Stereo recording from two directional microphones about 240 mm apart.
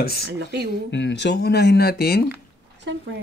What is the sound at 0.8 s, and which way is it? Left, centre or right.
Speech, left.